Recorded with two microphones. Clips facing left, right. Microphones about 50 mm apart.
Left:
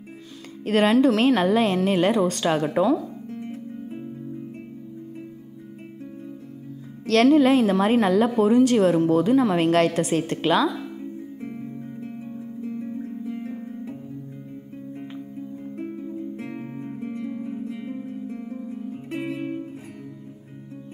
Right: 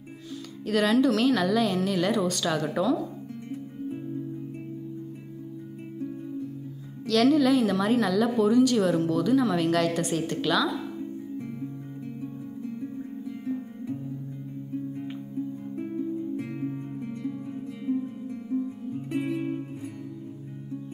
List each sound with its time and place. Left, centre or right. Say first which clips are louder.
0.7 s speech: left 4 dB; left
3.3 s music: left 4 dB; left
7.1 s speech: left 4 dB; left
11.4 s music: left 2 dB; left
16.3 s music: right 1 dB; left